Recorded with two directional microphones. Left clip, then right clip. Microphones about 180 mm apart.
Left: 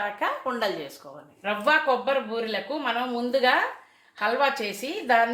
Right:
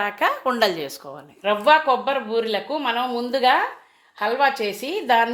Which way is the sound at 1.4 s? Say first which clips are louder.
Right 6 dB; 40° right (ahead or behind).